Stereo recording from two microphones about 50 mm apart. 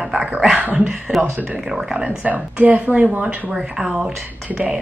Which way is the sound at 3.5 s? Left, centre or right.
Centre.